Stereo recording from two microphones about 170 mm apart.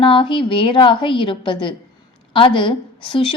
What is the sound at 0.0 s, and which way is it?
A woman's voice, 30° left (ahead or behind).